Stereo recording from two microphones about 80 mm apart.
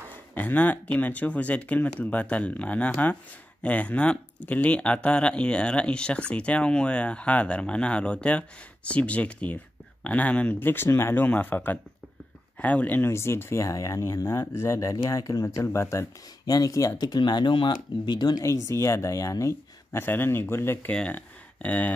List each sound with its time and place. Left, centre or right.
0.3 s speech: left
11.2 s speech: left
13.1 s speech: left
16.4 s speech: left
17.0 s speech: left
18.4 s speech: left
20.9 s speech: centre